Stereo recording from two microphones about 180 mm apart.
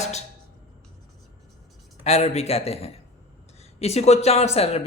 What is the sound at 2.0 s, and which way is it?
Speech, 35° left (ahead or behind).